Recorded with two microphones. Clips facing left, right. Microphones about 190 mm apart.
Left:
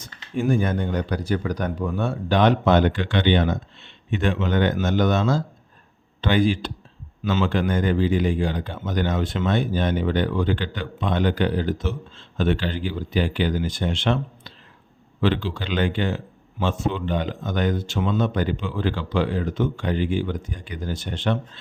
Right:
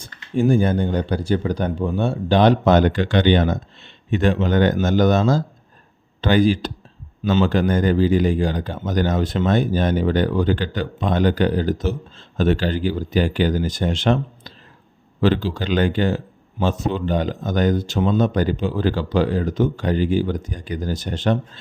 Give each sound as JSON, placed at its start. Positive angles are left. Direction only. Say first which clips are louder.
{"t": 0.0, "sound": "speech", "louder": "right 5 dB", "side_deg": -30}